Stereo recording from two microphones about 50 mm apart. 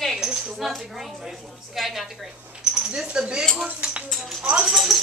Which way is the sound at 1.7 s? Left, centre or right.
Centre.